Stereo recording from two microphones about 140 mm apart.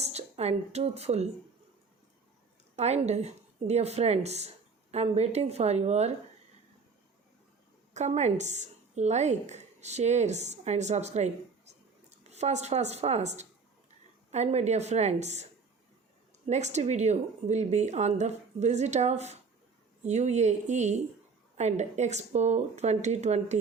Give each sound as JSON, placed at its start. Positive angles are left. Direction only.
{"t": 0.0, "sound": "speech", "side_deg": -50}
{"t": 2.7, "sound": "a woman's voice", "side_deg": -50}
{"t": 7.9, "sound": "a woman's voice", "side_deg": -55}
{"t": 16.5, "sound": "a woman's voice", "side_deg": -55}